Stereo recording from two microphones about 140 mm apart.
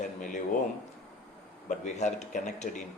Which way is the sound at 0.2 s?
65° left (ahead or behind).